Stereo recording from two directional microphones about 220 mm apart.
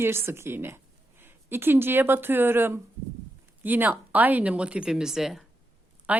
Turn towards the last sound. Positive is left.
turn(degrees=-5)  # may be behind; listen again after turning